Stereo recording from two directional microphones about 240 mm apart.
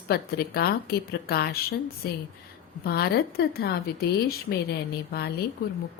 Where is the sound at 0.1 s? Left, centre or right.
Left.